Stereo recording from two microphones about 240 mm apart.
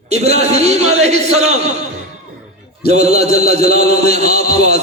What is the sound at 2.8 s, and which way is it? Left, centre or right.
Speech, right.